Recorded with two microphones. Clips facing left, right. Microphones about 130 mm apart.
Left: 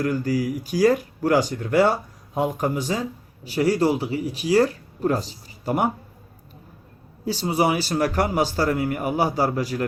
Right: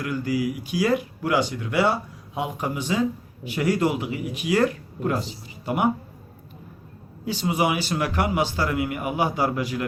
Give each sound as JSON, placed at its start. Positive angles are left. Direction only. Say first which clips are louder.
{"t": 0.0, "sound": "speech", "louder": "left 2 dB", "side_deg": 40}
{"t": 7.3, "sound": "speech", "louder": "left 2 dB", "side_deg": 35}